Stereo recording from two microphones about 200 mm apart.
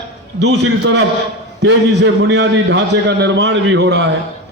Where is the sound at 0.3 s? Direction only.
60° right (ahead or behind).